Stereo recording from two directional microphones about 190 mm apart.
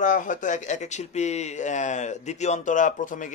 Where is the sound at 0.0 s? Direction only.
40° left (ahead or behind).